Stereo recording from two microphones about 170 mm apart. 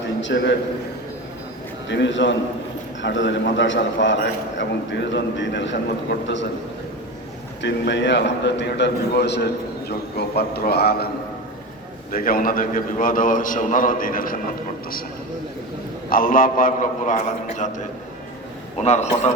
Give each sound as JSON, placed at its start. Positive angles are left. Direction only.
{"t": 0.2, "sound": "a man's voice", "side_deg": 90}
{"t": 1.9, "sound": "a man's voice", "side_deg": 90}
{"t": 7.6, "sound": "a man's voice", "side_deg": 90}
{"t": 10.2, "sound": "a man's voice", "side_deg": 70}
{"t": 12.1, "sound": "a man's voice", "side_deg": 55}
{"t": 16.0, "sound": "a man's voice", "side_deg": 55}
{"t": 18.8, "sound": "a man's voice", "side_deg": 40}